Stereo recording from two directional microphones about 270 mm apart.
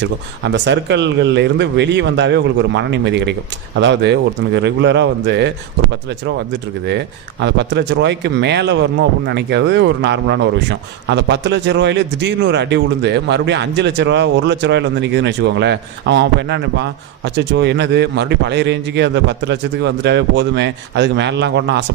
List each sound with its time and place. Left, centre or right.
0.0 s speech: right
6.8 s speech: right